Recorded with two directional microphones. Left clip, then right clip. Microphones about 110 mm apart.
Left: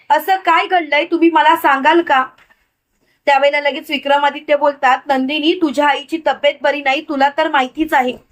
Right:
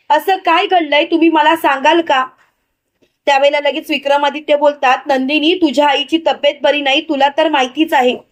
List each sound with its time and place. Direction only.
0.1 s a woman's voice: 50° right (ahead or behind)
3.2 s a woman's voice: 50° right (ahead or behind)